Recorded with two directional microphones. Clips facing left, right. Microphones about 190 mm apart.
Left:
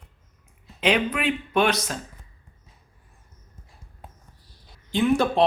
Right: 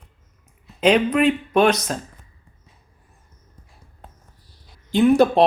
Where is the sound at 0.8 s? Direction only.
40° right (ahead or behind).